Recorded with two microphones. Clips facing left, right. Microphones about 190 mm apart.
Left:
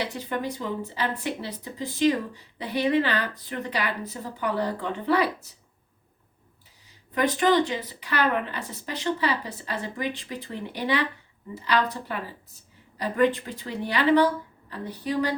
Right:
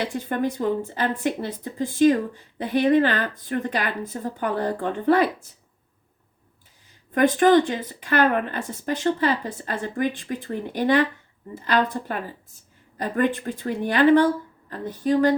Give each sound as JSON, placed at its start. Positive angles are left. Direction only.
{"t": 0.0, "sound": "speech", "side_deg": -50}
{"t": 7.1, "sound": "speech", "side_deg": -50}